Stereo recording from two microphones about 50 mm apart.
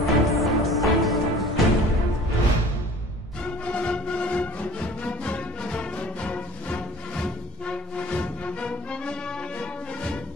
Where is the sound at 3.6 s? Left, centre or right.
Left.